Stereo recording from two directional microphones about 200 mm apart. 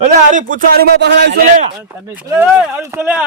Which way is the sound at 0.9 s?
60° right (ahead or behind).